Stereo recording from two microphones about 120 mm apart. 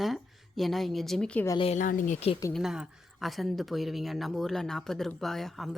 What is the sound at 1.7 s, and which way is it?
Speech, 90° left.